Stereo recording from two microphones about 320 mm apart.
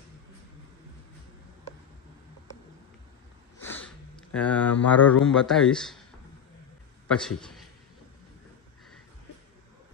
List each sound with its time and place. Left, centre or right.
3.6 s a sound: centre
5.2 s a man's voice: centre
7.1 s a man's voice: centre